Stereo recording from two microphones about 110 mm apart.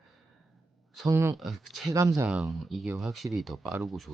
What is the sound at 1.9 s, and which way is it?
Speech, 30° right (ahead or behind).